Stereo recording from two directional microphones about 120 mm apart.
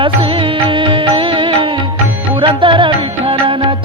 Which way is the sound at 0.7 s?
45° right (ahead or behind).